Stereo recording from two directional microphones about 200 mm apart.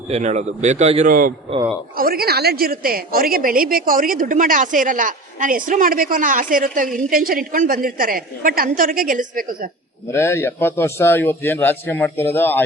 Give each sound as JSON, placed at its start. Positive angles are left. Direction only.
{"t": 0.1, "sound": "a man's voice", "side_deg": -35}
{"t": 2.0, "sound": "a woman's voice", "side_deg": -50}
{"t": 10.1, "sound": "a man's voice", "side_deg": 10}